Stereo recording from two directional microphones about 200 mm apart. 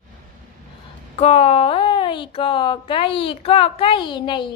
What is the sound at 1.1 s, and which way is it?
Speech, 30° left (ahead or behind).